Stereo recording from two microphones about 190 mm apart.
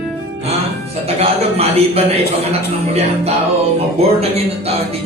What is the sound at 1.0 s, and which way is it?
A man's voice, 35° right (ahead or behind).